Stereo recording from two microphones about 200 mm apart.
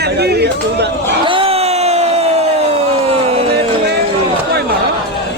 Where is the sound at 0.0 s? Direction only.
55° right (ahead or behind).